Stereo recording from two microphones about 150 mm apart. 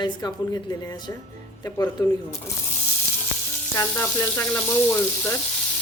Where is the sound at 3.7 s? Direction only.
20° left (ahead or behind).